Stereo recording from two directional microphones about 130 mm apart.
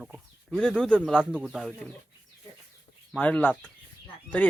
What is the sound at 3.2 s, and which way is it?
Speech, 10° left (ahead or behind).